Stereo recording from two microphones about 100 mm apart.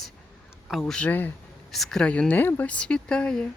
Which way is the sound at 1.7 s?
5° left (ahead or behind).